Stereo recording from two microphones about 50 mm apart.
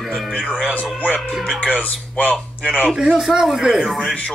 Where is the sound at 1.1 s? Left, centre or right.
Centre.